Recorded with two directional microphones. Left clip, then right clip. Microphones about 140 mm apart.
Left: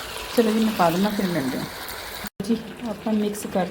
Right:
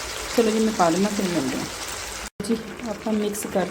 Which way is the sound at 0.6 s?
Centre (ahead or behind).